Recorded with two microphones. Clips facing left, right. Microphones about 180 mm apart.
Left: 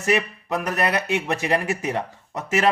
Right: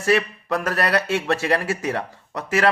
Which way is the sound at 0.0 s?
20° left (ahead or behind).